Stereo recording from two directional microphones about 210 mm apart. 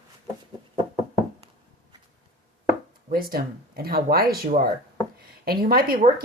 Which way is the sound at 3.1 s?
45° right (ahead or behind).